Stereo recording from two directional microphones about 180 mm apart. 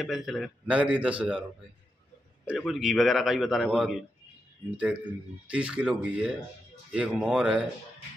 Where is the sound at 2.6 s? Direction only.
Centre (ahead or behind).